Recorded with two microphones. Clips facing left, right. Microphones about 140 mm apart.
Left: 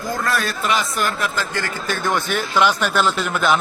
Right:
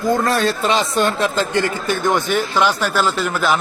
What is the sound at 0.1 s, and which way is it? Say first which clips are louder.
Speech: right 6 dB; 30° right (ahead or behind).